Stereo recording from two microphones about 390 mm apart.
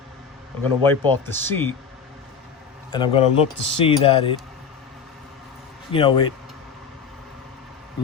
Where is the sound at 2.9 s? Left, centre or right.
Centre.